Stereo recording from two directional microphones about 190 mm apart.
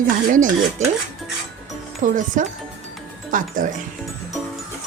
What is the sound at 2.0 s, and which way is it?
Speech, 45° right (ahead or behind).